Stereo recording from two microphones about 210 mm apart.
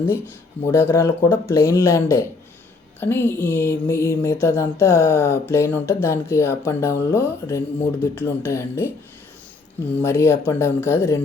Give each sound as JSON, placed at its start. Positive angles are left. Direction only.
{"t": 0.7, "sound": "speech", "side_deg": 10}
{"t": 9.9, "sound": "speech", "side_deg": 10}